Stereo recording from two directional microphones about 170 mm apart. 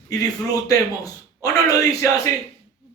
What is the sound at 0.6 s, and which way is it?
A man's voice, 20° left (ahead or behind).